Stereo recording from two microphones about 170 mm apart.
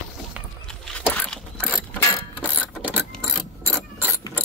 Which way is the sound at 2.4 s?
10° right (ahead or behind).